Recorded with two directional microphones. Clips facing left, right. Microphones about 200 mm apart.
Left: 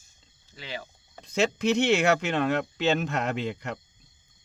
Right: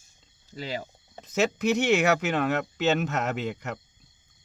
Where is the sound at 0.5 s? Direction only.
40° right (ahead or behind).